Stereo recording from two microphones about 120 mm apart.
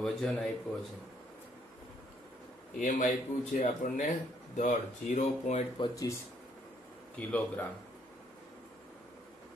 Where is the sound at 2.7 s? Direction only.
90° left; by 5.6 s 70° left (ahead or behind).